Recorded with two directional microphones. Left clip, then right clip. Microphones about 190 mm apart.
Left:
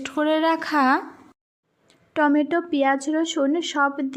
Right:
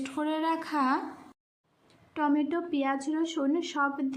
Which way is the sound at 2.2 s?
35° left (ahead or behind).